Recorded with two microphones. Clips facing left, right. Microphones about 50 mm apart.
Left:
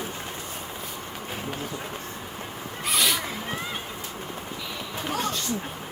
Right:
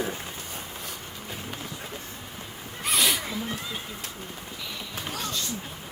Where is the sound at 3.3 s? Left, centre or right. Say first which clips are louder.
Left 1 dB; left.